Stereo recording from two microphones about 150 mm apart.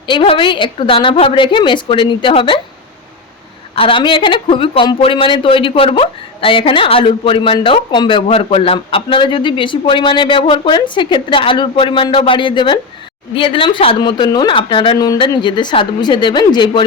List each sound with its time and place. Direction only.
0.1 s speech: 35° left (ahead or behind)
3.8 s speech: 35° left (ahead or behind)
14.9 s a woman's voice: 25° left (ahead or behind)